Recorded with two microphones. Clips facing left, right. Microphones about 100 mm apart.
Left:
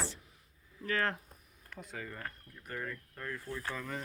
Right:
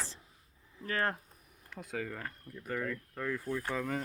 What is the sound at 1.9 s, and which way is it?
Speech, 90° right.